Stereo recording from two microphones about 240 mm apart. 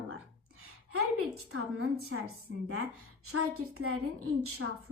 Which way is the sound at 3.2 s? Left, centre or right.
Right.